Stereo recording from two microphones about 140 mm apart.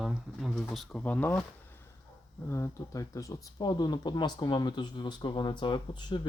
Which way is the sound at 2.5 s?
20° left (ahead or behind).